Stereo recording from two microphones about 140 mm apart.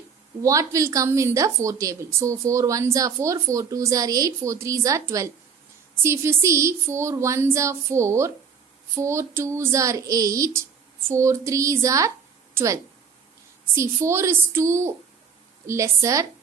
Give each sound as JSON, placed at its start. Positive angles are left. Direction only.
{"t": 0.4, "sound": "a woman's voice", "side_deg": -25}